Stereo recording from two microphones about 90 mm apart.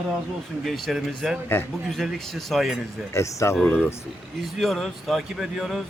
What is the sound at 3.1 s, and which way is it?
Speech, 30° left (ahead or behind).